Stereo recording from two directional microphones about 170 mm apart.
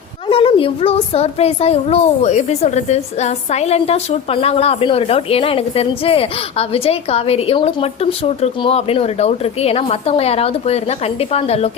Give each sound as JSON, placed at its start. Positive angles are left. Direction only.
{"t": 0.3, "sound": "a woman's voice", "side_deg": 30}